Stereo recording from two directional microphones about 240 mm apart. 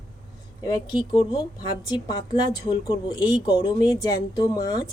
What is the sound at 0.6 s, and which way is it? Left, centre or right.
A woman's voice, centre.